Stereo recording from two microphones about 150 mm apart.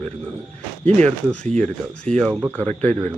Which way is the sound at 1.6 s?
5° left (ahead or behind).